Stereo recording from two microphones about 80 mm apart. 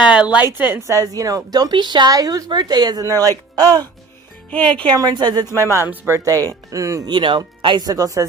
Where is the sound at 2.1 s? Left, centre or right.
Right.